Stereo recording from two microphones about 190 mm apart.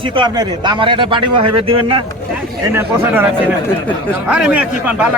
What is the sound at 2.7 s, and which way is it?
A man's voice, 10° right (ahead or behind).